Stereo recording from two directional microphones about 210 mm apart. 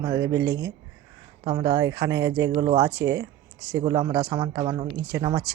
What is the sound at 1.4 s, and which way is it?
Speech, 20° right (ahead or behind).